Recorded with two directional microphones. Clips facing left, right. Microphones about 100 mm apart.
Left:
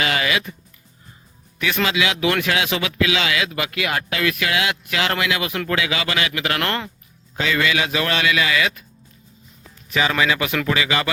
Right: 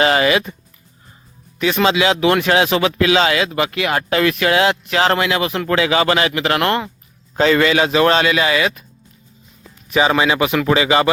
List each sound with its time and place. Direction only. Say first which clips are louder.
0.0 s speech: right 7 dB; 35° right (ahead or behind)
1.5 s speech: right 6 dB; 25° right (ahead or behind)
7.3 s speech: right 7 dB; 40° right (ahead or behind)
9.9 s speech: right 5 dB; 25° right (ahead or behind)